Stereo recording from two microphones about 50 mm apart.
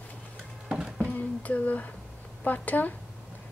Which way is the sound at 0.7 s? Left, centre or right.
Centre.